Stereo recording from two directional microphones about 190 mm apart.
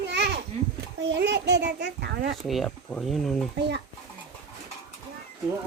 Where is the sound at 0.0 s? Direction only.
65° right (ahead or behind).